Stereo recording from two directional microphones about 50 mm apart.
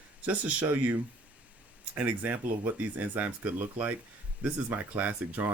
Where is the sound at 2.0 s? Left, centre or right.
Right.